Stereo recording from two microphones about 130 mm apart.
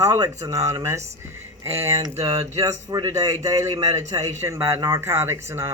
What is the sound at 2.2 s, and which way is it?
Speech, 50° right (ahead or behind).